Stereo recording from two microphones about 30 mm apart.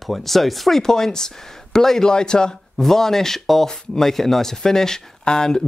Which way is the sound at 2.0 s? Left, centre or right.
Left.